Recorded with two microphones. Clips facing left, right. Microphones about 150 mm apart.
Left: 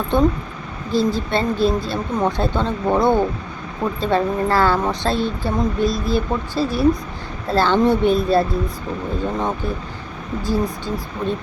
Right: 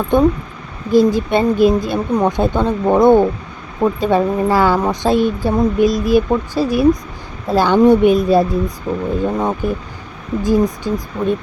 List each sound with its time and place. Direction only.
0.1 s speech: 15° right (ahead or behind)